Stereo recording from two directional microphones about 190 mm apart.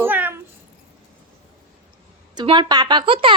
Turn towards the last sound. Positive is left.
turn(degrees=-25)  # may be behind; listen again after turning